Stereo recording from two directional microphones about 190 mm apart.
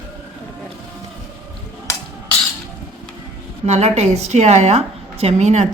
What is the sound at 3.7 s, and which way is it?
A woman's voice, 35° right (ahead or behind).